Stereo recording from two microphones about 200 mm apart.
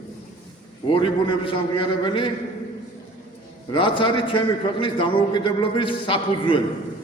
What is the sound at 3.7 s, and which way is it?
A man's voice, 25° left (ahead or behind).